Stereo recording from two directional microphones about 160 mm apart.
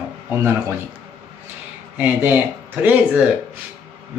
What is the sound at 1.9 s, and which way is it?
Speech, 10° right (ahead or behind).